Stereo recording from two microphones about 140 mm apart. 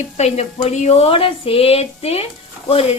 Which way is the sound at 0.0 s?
50° left (ahead or behind).